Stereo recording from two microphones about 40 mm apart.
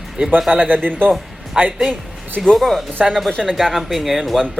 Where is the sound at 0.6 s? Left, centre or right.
Centre.